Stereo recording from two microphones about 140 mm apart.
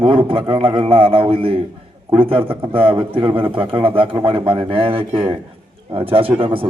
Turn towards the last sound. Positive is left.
turn(degrees=-40)  # may be behind; listen again after turning